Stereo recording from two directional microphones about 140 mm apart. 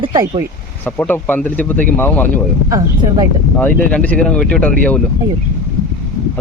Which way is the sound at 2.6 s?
25° right (ahead or behind).